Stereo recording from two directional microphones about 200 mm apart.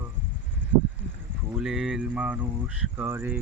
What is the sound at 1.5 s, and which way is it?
Speech, centre (ahead or behind).